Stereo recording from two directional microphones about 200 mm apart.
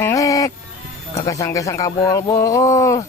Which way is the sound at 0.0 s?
15° left (ahead or behind).